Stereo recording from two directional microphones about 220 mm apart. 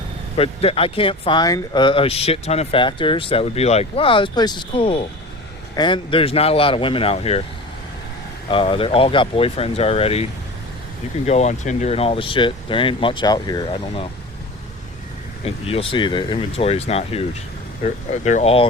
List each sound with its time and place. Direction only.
0.3 s speech: 25° left (ahead or behind)
8.4 s speech: 25° left (ahead or behind)
11.3 s speech: 30° left (ahead or behind)
15.4 s speech: 25° left (ahead or behind)